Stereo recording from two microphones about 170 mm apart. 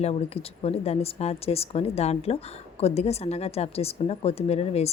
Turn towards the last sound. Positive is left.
turn(degrees=35)  # may be behind; listen again after turning